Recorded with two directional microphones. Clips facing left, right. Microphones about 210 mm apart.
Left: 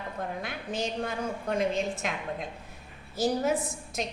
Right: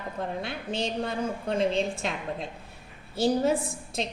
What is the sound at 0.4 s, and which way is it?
A woman's voice, 30° right (ahead or behind).